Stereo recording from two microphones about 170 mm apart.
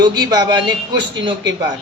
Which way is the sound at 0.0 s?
25° right (ahead or behind).